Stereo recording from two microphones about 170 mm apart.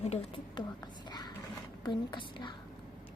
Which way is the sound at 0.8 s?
25° left (ahead or behind).